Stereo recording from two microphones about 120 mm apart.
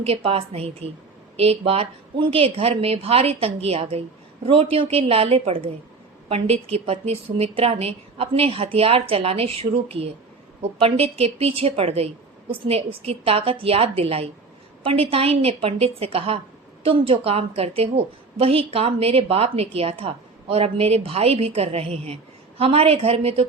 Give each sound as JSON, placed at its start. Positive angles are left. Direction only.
{"t": 0.0, "sound": "a woman's voice", "side_deg": -55}